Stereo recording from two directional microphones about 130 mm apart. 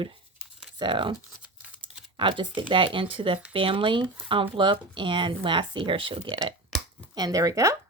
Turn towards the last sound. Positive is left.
turn(degrees=-25)  # may be behind; listen again after turning